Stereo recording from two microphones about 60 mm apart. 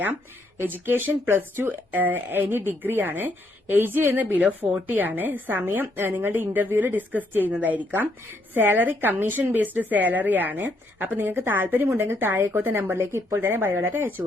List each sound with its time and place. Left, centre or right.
0.9 s speech: right
4.3 s speech: right
11.9 s a woman's voice: right